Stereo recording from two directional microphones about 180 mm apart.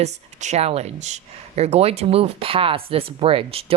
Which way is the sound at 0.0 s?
40° right (ahead or behind).